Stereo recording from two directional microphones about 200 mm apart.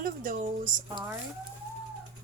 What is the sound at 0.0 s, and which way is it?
Speech, 45° right (ahead or behind).